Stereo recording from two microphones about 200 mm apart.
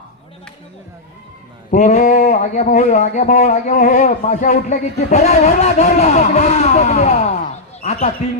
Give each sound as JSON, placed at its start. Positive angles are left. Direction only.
{"t": 1.7, "sound": "speech", "side_deg": 35}